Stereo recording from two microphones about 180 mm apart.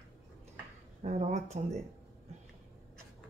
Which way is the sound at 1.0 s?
40° right (ahead or behind).